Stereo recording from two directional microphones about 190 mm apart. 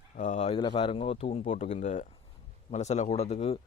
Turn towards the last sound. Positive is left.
turn(degrees=35)  # may be behind; listen again after turning